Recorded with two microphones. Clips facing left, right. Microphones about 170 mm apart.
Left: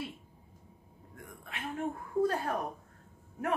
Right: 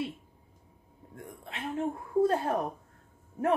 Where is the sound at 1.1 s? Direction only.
25° right (ahead or behind).